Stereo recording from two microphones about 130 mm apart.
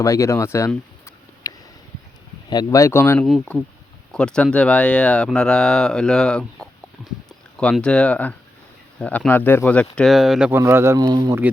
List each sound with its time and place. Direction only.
0.0 s speech: 25° left (ahead or behind)
1.5 s a sound: 25° left (ahead or behind)
2.5 s speech: 30° left (ahead or behind); by 10.5 s 5° right (ahead or behind)
10.5 s speech: 20° right (ahead or behind)